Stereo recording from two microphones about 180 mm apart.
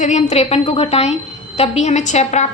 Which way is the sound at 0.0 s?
40° left (ahead or behind).